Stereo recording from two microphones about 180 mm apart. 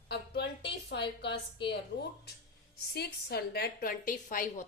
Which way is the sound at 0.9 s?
70° left (ahead or behind).